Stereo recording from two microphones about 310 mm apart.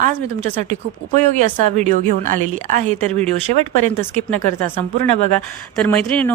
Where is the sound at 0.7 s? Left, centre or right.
Right.